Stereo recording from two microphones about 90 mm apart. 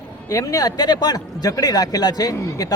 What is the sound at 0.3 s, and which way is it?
A man's voice, 40° left (ahead or behind).